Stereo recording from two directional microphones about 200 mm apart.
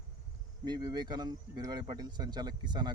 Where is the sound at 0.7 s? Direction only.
20° right (ahead or behind).